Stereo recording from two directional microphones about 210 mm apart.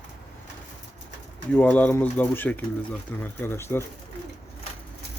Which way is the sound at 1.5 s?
10° left (ahead or behind).